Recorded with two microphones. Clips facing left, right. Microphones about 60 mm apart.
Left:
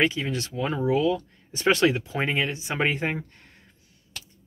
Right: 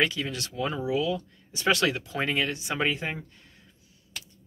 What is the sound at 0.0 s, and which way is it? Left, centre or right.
Speech, left.